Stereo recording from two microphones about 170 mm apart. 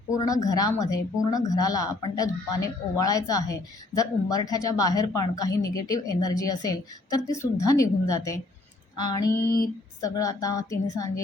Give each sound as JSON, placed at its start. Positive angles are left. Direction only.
{"t": 0.3, "sound": "speech", "side_deg": 20}